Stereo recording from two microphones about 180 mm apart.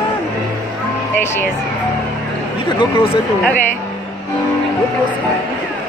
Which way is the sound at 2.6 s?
30° left (ahead or behind).